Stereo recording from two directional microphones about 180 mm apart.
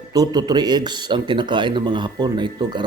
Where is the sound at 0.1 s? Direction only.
20° right (ahead or behind).